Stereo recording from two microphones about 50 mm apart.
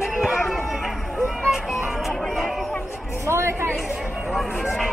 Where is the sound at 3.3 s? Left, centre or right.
Right.